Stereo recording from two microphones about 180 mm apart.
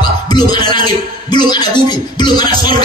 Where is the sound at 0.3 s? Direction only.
25° left (ahead or behind).